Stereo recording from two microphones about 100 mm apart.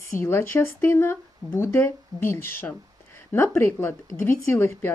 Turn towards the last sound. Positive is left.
turn(degrees=25)  # may be behind; listen again after turning